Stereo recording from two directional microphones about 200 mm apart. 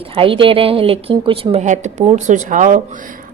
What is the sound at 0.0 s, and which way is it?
A woman's voice, 25° right (ahead or behind).